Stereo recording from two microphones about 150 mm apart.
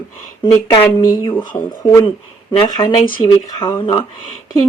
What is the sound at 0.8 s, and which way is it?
Speech, 20° left (ahead or behind).